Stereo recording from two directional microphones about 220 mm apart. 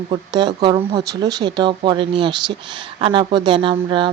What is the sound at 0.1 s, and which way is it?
Speech, 20° right (ahead or behind).